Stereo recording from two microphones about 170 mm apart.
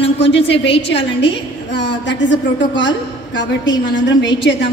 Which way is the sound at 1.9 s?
90° left.